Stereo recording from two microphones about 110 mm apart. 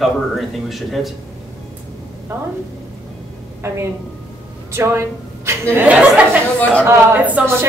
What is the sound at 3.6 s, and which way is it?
A woman's voice, 25° right (ahead or behind).